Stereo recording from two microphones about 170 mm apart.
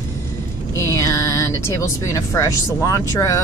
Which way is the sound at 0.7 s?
20° left (ahead or behind).